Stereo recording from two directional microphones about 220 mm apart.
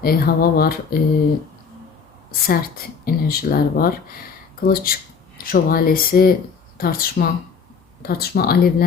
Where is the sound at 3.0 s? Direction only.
45° left (ahead or behind).